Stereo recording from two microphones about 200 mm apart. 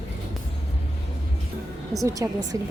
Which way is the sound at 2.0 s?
15° right (ahead or behind).